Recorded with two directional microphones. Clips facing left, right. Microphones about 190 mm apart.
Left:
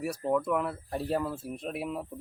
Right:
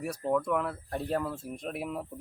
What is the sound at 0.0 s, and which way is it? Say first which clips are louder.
Speech: left 1 dB; 5° left (ahead or behind).